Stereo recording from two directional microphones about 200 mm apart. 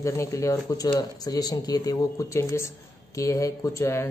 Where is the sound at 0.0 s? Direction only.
15° left (ahead or behind).